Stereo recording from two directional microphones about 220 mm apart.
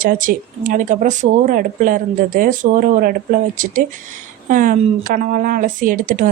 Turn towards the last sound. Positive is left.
turn(degrees=-40)  # may be behind; listen again after turning